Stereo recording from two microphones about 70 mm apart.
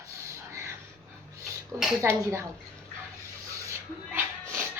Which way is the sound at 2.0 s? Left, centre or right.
Right.